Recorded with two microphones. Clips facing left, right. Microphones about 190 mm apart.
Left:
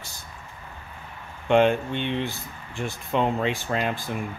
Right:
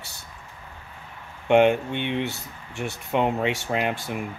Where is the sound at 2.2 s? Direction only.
70° right (ahead or behind).